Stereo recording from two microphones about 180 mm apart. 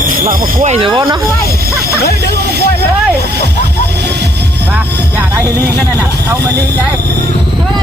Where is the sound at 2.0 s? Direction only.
60° left (ahead or behind).